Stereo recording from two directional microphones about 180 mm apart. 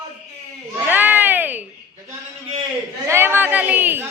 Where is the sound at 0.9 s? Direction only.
10° right (ahead or behind).